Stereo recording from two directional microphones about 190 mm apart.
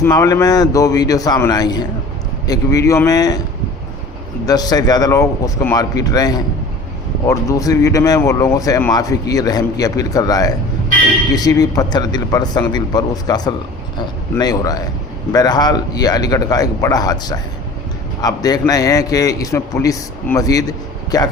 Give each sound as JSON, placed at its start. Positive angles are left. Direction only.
{"t": 0.0, "sound": "a man's voice", "side_deg": 15}
{"t": 4.4, "sound": "speech", "side_deg": 20}